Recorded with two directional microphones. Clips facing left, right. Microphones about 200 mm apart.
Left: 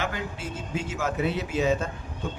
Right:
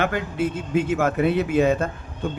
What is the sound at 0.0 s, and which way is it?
A man's voice, 60° right (ahead or behind).